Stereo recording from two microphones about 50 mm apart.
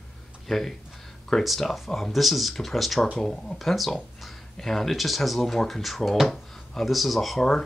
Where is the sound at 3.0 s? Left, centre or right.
Centre.